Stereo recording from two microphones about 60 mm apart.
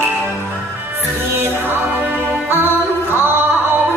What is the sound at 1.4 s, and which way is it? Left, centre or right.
Music, right.